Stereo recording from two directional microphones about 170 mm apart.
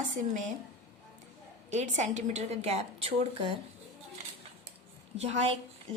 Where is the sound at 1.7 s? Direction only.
45° right (ahead or behind).